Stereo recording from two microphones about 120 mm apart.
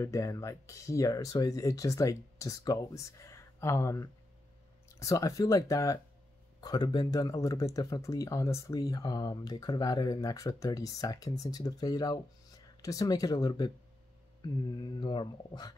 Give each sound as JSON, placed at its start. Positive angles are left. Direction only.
{"t": 0.0, "sound": "speech", "side_deg": 25}